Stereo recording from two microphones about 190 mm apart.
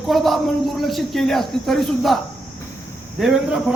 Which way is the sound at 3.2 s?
5° right (ahead or behind).